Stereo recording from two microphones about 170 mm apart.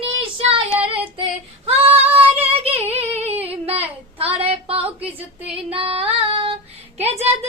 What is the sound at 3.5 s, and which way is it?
Child singing, 35° right (ahead or behind).